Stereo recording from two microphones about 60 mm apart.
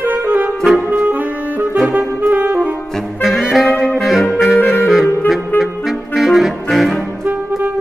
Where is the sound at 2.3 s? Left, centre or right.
Right.